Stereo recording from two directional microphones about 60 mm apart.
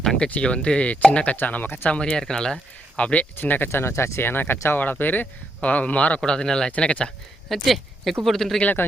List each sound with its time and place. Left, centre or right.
0.0 s a sound: centre
0.3 s speech: left
1.4 s speech: left
2.0 s speech: centre
3.1 s speech: left
4.2 s speech: left
4.8 s speech: left; by 6.7 s centre
6.7 s speech: left
7.5 s speech: centre
8.6 s speech: left